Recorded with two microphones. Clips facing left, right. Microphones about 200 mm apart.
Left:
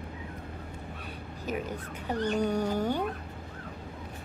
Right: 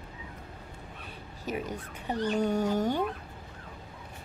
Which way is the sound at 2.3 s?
10° right (ahead or behind).